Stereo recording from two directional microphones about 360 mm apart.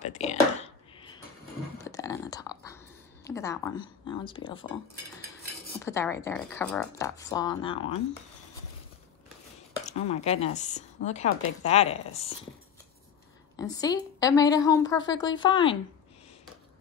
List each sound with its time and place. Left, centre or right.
0.0 s a sound: centre
3.3 s speech: centre
5.8 s a woman's voice: centre
9.8 s a woman's voice: centre
13.6 s a woman's voice: centre